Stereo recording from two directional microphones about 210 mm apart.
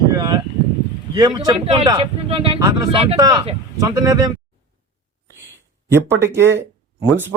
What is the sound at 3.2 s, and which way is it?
Speech, 15° right (ahead or behind).